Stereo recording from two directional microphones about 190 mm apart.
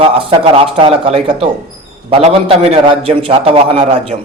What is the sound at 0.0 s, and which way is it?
A man's voice, 30° right (ahead or behind).